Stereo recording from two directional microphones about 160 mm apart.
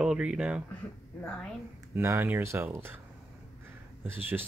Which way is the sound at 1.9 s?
15° right (ahead or behind).